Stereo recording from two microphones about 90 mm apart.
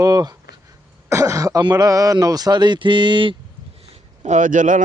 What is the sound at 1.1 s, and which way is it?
Speech, 35° right (ahead or behind).